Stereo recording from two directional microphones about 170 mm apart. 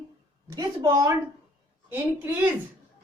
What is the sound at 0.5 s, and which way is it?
A woman's voice, 20° right (ahead or behind).